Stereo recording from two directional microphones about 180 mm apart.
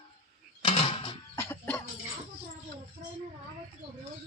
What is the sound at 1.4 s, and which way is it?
Music, 10° left (ahead or behind).